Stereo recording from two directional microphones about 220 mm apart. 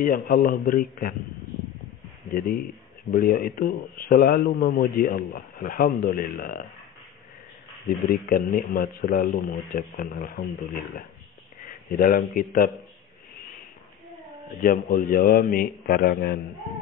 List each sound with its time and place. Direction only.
0.0 s speech: 45° left (ahead or behind)
2.3 s speech: 45° left (ahead or behind)
8.1 s speech: 45° left (ahead or behind)
14.6 s speech: 40° left (ahead or behind)